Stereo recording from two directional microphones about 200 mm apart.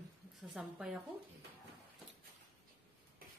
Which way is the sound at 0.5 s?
5° right (ahead or behind).